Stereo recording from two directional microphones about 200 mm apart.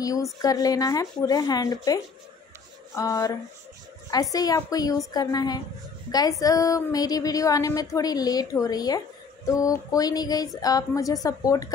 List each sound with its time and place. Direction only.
0.0 s a woman's voice: 15° left (ahead or behind)
3.0 s a woman's voice: 15° left (ahead or behind)